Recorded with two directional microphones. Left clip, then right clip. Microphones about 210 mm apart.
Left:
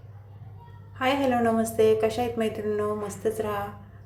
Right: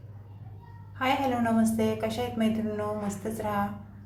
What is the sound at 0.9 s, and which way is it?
A woman's voice, 10° left (ahead or behind).